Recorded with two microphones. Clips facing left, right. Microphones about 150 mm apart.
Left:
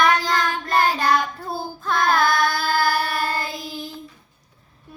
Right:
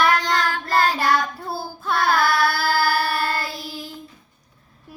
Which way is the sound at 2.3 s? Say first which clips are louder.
Right 1 dB; 20° left (ahead or behind).